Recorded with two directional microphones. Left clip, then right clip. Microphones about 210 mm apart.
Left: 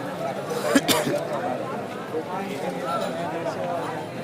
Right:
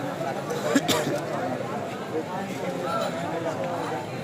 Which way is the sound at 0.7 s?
40° left (ahead or behind).